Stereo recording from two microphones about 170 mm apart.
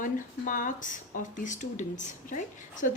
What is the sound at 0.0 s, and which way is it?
A woman's voice, 50° left (ahead or behind).